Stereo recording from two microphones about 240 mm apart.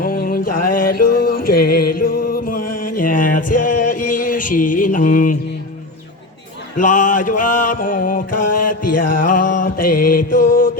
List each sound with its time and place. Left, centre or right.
0.0 s mantra: left
0.7 s music: left
2.6 s music: left
3.0 s music: left
6.7 s mantra: left
8.4 s a sound: left
9.0 s music: left
10.3 s mantra: left